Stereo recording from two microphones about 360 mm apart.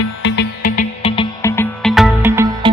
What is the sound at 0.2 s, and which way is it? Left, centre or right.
Music, left.